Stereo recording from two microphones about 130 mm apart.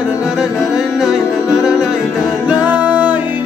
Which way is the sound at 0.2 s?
5° right (ahead or behind).